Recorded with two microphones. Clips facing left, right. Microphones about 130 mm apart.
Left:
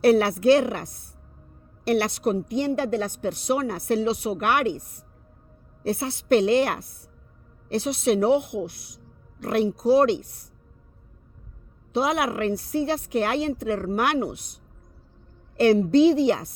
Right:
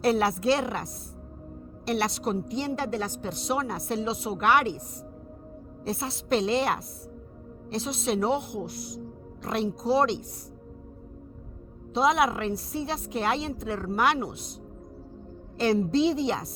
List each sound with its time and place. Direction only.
0.0 s a woman's voice: 60° left (ahead or behind)
1.9 s a woman's voice: 60° left (ahead or behind)
5.9 s a woman's voice: 60° left (ahead or behind)
11.9 s a woman's voice: 60° left (ahead or behind)
15.5 s a woman's voice: 60° left (ahead or behind)